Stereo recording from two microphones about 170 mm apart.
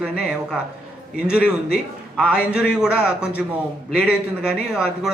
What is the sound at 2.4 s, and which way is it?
Speech, 5° right (ahead or behind).